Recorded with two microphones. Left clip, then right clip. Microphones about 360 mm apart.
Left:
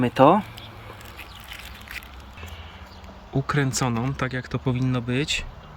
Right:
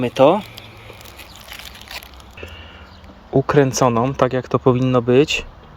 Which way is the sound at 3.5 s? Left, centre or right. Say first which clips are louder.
Right 10 dB; centre.